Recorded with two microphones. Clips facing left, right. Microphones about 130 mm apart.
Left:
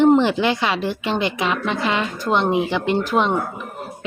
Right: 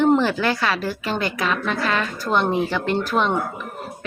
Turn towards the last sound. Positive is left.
turn(degrees=15)  # may be behind; listen again after turning